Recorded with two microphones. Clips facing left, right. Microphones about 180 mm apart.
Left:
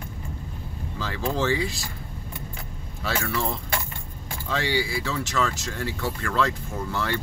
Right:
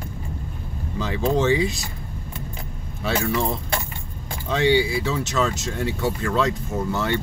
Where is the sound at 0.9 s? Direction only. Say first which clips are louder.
Right 6 dB; 20° right (ahead or behind).